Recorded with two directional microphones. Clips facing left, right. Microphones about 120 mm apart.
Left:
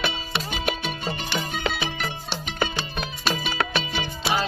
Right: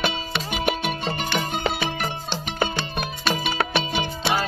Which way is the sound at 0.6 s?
60° right (ahead or behind).